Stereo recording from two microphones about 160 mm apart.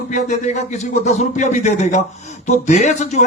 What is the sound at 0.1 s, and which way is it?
A man's voice, 45° left (ahead or behind).